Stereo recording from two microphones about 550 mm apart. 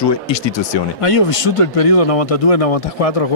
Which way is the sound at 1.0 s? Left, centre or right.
Left.